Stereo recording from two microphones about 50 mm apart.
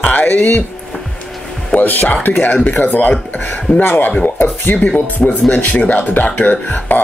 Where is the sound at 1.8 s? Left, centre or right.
Left.